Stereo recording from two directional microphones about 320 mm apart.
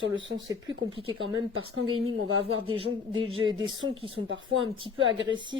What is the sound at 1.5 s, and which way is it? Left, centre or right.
Speech, right.